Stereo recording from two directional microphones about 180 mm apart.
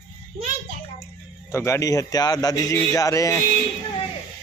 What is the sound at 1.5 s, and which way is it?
A man's voice, 15° left (ahead or behind).